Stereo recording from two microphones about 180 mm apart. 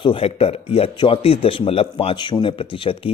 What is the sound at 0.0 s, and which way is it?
Speech, 30° left (ahead or behind).